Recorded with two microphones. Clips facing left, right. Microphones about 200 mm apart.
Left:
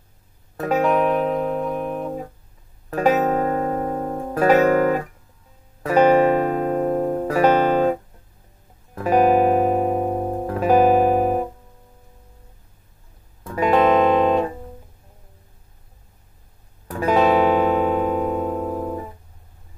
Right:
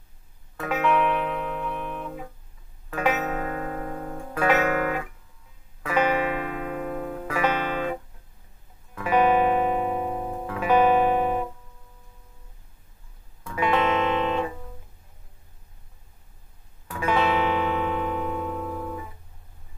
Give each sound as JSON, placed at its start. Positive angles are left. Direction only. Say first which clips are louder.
{"t": 0.6, "sound": "music", "louder": "left 5 dB", "side_deg": 40}
{"t": 13.4, "sound": "music", "louder": "left 6 dB", "side_deg": 40}
{"t": 16.8, "sound": "music", "louder": "left 6 dB", "side_deg": 35}